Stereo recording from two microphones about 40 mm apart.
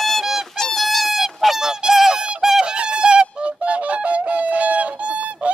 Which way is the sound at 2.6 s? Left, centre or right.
Right.